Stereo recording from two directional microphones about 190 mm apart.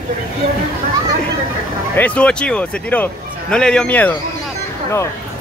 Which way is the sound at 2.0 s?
5° left (ahead or behind).